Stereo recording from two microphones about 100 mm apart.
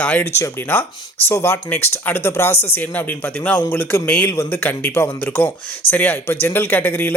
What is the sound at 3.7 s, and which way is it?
Speech, 20° left (ahead or behind).